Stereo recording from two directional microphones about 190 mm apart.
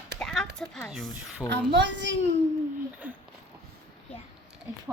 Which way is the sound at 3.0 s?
10° right (ahead or behind).